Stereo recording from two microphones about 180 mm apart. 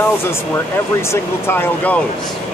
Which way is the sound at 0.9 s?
15° left (ahead or behind).